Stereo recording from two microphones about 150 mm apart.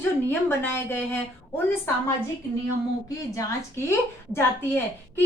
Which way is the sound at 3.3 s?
20° left (ahead or behind).